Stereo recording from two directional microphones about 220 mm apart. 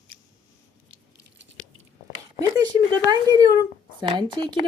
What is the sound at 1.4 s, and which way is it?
Biting, 60° right (ahead or behind).